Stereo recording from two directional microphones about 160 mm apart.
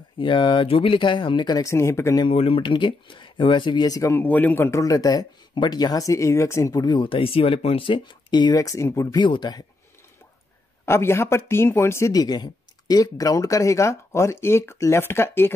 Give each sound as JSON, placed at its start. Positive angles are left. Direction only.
{"t": 0.2, "sound": "speech", "side_deg": 30}
{"t": 2.2, "sound": "speech", "side_deg": 35}
{"t": 10.9, "sound": "speech", "side_deg": 15}